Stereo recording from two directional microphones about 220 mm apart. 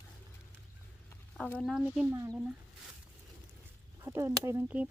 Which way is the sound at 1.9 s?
10° right (ahead or behind).